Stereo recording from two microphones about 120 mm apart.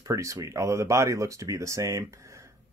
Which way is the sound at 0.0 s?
25° right (ahead or behind).